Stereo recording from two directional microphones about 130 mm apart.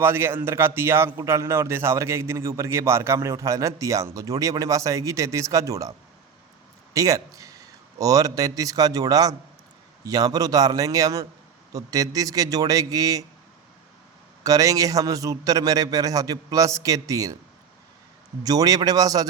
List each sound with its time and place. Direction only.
0.0 s a man's voice: 20° right (ahead or behind)
6.9 s a man's voice: 25° right (ahead or behind)
14.4 s a man's voice: 25° right (ahead or behind)
18.4 s a man's voice: 30° right (ahead or behind)